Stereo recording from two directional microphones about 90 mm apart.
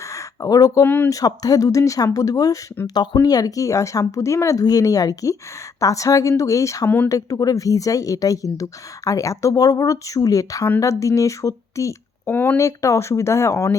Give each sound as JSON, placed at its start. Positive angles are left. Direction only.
{"t": 0.1, "sound": "a sound", "side_deg": 40}
{"t": 0.9, "sound": "speech", "side_deg": 20}
{"t": 1.1, "sound": "a woman's voice", "side_deg": 45}
{"t": 2.8, "sound": "a woman's voice", "side_deg": 55}
{"t": 12.3, "sound": "speech", "side_deg": 20}
{"t": 12.5, "sound": "a woman's voice", "side_deg": 35}